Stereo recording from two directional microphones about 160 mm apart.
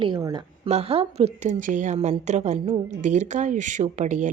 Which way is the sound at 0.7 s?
40° right (ahead or behind).